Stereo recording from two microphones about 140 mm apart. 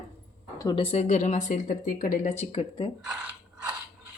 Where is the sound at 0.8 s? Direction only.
50° left (ahead or behind).